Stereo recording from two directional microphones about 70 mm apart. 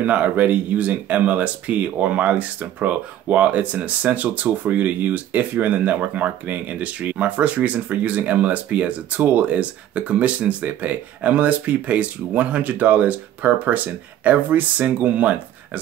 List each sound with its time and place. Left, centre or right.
0.0 s speech: right